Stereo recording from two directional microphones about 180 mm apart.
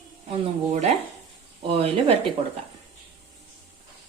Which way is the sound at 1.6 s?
30° right (ahead or behind).